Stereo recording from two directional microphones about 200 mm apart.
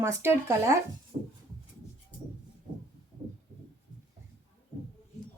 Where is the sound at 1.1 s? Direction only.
40° right (ahead or behind).